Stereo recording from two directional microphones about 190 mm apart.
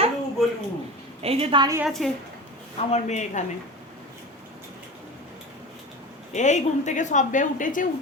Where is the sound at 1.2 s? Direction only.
30° right (ahead or behind).